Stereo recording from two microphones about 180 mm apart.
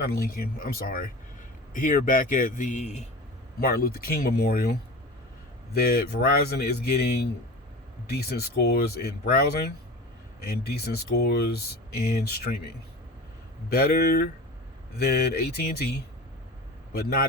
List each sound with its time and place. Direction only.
0.0 s a man's voice: 60° left (ahead or behind); by 3.1 s 40° left (ahead or behind)
3.6 s speech: 55° left (ahead or behind)
8.1 s speech: 60° left (ahead or behind)
13.7 s speech: 60° left (ahead or behind)
17.0 s speech: 55° left (ahead or behind)